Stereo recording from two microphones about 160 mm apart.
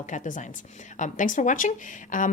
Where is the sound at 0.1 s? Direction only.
55° left (ahead or behind).